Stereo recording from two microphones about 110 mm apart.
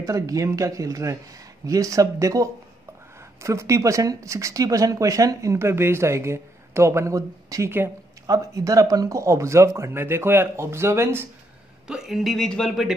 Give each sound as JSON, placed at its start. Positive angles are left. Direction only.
{"t": 0.0, "sound": "speech", "side_deg": -30}
{"t": 11.9, "sound": "speech", "side_deg": -5}